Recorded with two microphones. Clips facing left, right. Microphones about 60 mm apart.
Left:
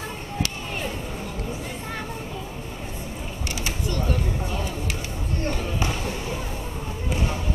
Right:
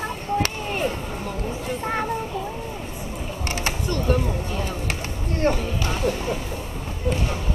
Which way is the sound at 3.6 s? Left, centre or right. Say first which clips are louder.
Right 4 dB; right.